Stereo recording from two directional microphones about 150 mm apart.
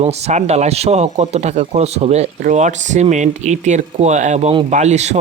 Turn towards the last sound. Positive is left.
turn(degrees=-50)  # may be behind; listen again after turning